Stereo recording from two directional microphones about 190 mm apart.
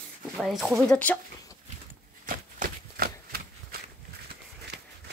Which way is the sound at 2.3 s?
50° right (ahead or behind).